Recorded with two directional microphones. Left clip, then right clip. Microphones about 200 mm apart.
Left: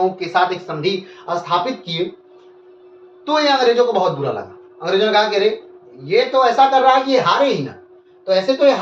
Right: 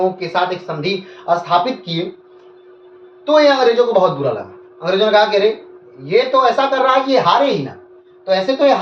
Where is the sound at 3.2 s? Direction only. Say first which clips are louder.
Right 6 dB; 15° left (ahead or behind).